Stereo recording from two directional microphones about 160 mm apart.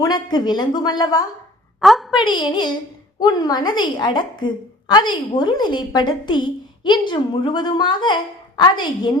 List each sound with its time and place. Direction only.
0.0 s a woman's voice: 25° left (ahead or behind)
1.8 s a woman's voice: centre (ahead or behind)
2.1 s a woman's voice: 25° left (ahead or behind)